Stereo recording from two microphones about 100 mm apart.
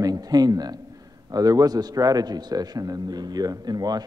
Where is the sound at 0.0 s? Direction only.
40° right (ahead or behind).